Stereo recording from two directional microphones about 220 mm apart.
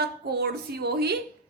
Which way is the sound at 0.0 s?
45° right (ahead or behind).